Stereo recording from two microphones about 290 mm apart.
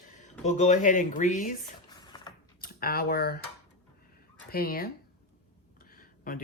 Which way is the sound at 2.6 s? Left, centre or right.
Left.